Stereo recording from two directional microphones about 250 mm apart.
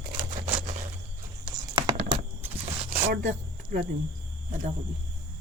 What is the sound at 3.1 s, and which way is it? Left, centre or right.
Speech, right.